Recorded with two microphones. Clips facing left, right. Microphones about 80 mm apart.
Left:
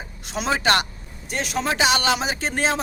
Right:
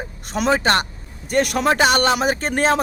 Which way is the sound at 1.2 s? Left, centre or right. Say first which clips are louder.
Right 7 dB; right.